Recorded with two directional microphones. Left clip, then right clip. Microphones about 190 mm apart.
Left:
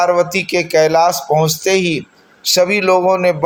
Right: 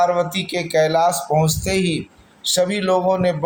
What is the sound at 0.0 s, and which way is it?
A man's voice, 25° left (ahead or behind).